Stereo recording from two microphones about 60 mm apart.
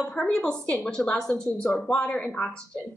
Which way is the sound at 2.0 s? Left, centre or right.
Left.